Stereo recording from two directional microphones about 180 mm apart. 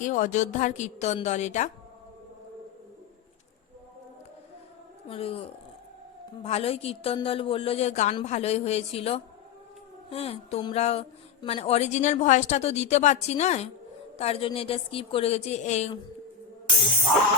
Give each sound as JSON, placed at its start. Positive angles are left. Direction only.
{"t": 0.0, "sound": "a woman's voice", "side_deg": 45}
{"t": 5.0, "sound": "a woman's voice", "side_deg": 30}